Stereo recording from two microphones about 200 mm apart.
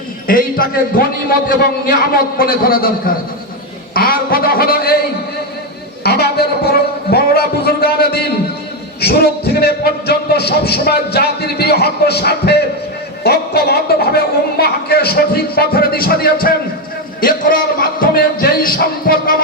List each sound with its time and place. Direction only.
0.3 s speech: 45° left (ahead or behind)
2.4 s speech: 45° left (ahead or behind)
3.9 s speech: 45° left (ahead or behind)
6.0 s a sound: 55° left (ahead or behind)
9.0 s speech: 50° left (ahead or behind)